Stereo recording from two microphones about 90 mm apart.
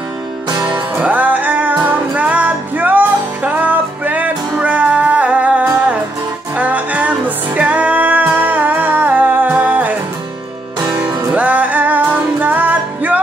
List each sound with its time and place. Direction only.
0.9 s music: 15° right (ahead or behind)
11.3 s music: 15° right (ahead or behind)